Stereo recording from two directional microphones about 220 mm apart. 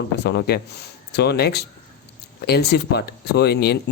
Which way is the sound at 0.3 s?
50° left (ahead or behind).